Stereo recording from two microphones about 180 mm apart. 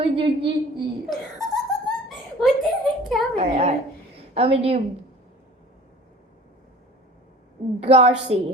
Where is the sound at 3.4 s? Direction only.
35° right (ahead or behind).